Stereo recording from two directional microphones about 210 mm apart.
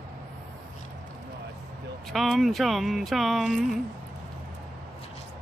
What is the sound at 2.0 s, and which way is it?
Speech, centre (ahead or behind).